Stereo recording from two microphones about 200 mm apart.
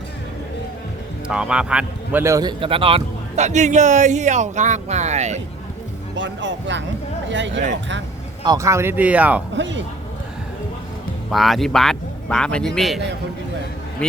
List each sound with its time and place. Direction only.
1.3 s a man's voice: 5° right (ahead or behind); by 5.4 s 35° right (ahead or behind)
6.1 s speech: 65° right (ahead or behind)
8.4 s speech: 15° right (ahead or behind)
9.6 s speech: 65° right (ahead or behind)
11.3 s speech: centre (ahead or behind)